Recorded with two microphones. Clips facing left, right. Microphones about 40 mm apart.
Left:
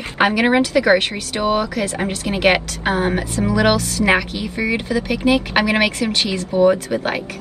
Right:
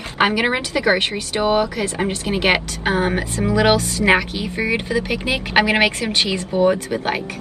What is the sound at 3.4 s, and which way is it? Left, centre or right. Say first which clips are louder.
Speech: right 1 dB; right.